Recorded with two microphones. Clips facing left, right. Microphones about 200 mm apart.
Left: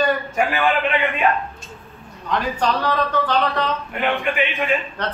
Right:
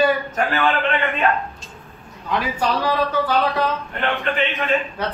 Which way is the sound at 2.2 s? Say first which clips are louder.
Left 1 dB; 10° right (ahead or behind).